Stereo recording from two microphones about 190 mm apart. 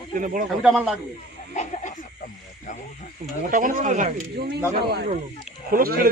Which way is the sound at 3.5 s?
45° right (ahead or behind).